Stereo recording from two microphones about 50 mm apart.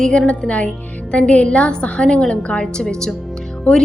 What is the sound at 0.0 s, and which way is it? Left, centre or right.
A woman's voice, left.